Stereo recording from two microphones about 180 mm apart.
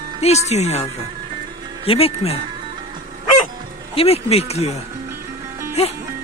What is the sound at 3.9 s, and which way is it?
Speech, 35° left (ahead or behind).